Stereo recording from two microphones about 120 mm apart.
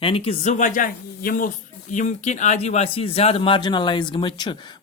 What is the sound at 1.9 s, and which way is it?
Speech, 85° left.